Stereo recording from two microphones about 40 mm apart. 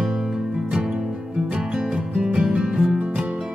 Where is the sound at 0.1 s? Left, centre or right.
Centre.